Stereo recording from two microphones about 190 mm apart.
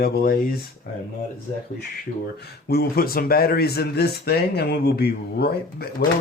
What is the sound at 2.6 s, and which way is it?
Speech, 55° left (ahead or behind).